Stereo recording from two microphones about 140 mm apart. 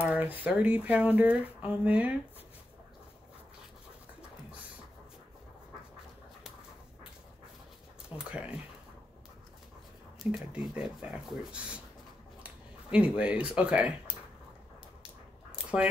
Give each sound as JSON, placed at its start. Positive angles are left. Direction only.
{"t": 0.0, "sound": "speech", "side_deg": -10}
{"t": 8.2, "sound": "speech", "side_deg": -10}
{"t": 10.3, "sound": "speech", "side_deg": -5}
{"t": 15.5, "sound": "quack", "side_deg": -10}